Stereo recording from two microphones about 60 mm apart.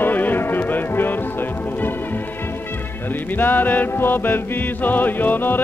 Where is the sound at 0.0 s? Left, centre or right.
Left.